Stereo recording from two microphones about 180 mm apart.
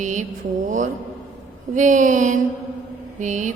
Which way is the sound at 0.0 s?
40° right (ahead or behind).